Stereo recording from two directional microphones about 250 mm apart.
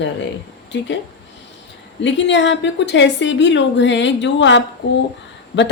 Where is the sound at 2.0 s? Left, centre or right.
Left.